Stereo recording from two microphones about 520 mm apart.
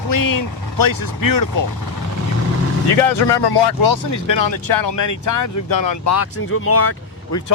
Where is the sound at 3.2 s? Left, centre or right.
Centre.